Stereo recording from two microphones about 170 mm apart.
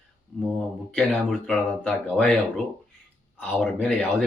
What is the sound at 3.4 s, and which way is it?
Speech, 5° left (ahead or behind).